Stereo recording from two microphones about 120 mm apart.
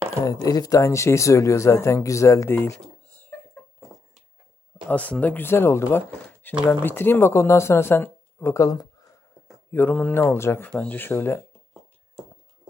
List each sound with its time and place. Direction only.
0.3 s speech: 30° left (ahead or behind)
4.9 s speech: 10° left (ahead or behind); by 9.0 s 30° left (ahead or behind)
9.7 s speech: 15° left (ahead or behind)